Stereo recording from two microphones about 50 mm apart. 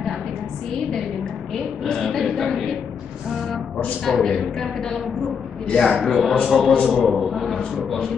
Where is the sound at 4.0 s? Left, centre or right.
Centre.